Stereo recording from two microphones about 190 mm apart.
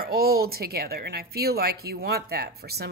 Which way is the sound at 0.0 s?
55° right (ahead or behind).